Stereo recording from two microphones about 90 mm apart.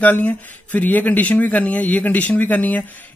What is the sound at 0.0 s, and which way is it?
Speech, 20° left (ahead or behind).